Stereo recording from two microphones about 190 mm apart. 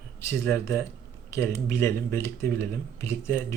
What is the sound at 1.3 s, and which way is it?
Speech, 15° left (ahead or behind).